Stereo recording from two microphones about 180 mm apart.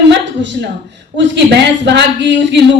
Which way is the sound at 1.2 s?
75° right (ahead or behind).